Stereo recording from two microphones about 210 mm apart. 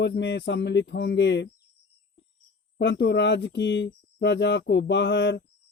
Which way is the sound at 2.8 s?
55° left (ahead or behind).